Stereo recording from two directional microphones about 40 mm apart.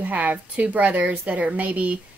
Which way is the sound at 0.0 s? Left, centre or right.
Right.